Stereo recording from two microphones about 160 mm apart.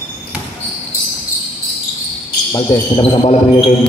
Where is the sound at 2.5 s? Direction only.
25° left (ahead or behind).